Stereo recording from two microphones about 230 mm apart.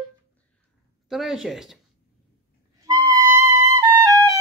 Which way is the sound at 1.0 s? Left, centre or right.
Centre.